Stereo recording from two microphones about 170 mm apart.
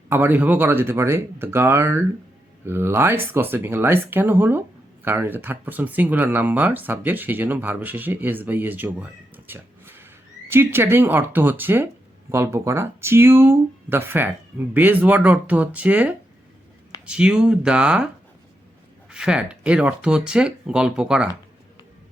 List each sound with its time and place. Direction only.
0.1 s speech: 10° right (ahead or behind)
19.1 s speech: 5° right (ahead or behind)